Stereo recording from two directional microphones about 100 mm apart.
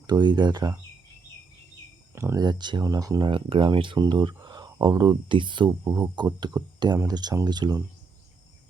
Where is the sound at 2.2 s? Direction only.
40° right (ahead or behind).